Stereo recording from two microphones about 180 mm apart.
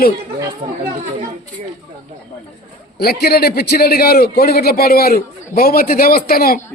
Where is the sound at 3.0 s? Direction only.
60° left (ahead or behind).